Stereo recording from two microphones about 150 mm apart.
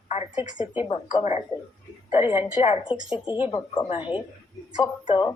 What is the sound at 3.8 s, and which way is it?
Speech, 35° left (ahead or behind).